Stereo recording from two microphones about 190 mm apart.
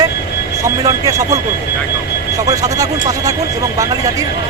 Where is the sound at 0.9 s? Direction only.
15° right (ahead or behind).